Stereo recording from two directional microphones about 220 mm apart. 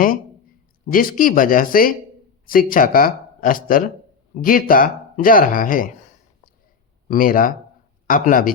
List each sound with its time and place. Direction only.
0.9 s speech: 40° left (ahead or behind)